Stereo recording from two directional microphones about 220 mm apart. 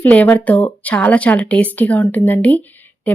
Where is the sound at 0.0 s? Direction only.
5° left (ahead or behind).